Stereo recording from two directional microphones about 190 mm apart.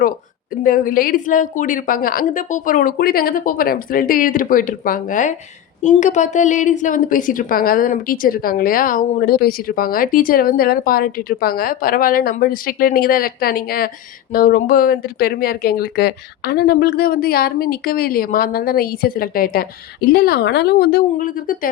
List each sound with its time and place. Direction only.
0.6 s a woman's voice: 45° left (ahead or behind)